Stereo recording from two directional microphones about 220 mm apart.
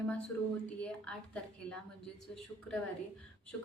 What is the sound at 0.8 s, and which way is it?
A woman's voice, 5° left (ahead or behind).